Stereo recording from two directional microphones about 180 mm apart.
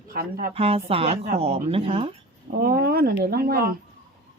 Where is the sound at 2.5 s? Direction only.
55° right (ahead or behind).